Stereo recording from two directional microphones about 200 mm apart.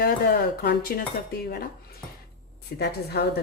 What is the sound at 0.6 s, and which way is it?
Speech, 50° left (ahead or behind).